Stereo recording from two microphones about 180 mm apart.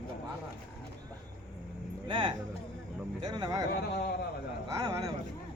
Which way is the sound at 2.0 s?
25° right (ahead or behind).